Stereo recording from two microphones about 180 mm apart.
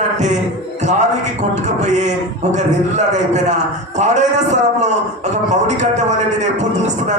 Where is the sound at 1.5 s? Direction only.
40° right (ahead or behind).